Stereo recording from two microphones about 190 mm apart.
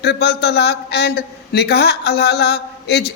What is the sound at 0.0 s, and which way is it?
A man's voice, 60° left (ahead or behind).